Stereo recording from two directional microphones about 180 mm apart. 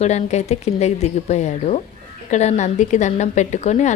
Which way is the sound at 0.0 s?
40° left (ahead or behind).